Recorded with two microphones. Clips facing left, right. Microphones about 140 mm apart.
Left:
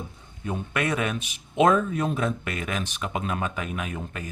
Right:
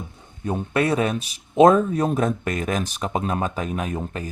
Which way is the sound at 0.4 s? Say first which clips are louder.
Right 6 dB; 35° right (ahead or behind).